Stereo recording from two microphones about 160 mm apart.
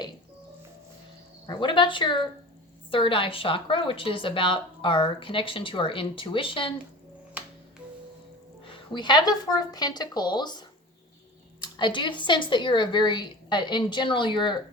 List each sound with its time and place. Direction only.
1.5 s a woman's voice: 30° left (ahead or behind)
8.6 s a woman's voice: 30° left (ahead or behind)